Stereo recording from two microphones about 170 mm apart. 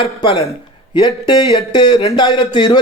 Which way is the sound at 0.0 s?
30° left (ahead or behind).